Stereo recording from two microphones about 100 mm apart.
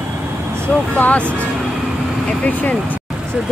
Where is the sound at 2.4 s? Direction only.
15° left (ahead or behind).